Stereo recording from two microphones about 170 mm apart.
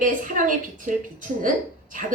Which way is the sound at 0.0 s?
50° right (ahead or behind).